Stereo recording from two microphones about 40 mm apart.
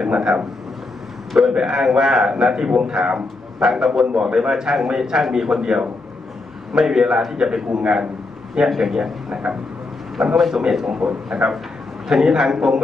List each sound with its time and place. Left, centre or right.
0.0 s speech: centre
1.5 s a man's voice: centre
3.7 s a man's voice: centre
8.6 s a man's voice: centre
8.9 s a man's voice: centre